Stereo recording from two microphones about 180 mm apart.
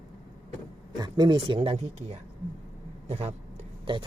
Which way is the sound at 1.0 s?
25° right (ahead or behind).